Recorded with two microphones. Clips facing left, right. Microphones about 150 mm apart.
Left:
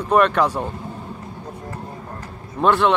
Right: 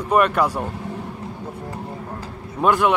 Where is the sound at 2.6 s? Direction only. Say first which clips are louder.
Left 1 dB; 10° right (ahead or behind).